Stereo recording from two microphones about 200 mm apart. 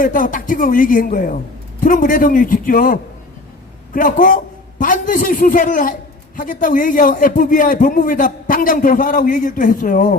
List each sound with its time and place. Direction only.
0.0 s a man's voice: 40° left (ahead or behind)